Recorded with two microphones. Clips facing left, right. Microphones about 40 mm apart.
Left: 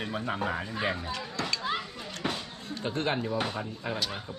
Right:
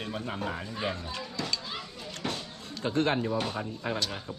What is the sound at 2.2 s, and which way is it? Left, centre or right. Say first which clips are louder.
Music: left 2 dB; centre.